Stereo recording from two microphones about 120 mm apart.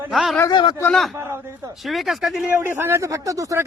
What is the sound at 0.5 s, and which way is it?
Speech, 40° left (ahead or behind).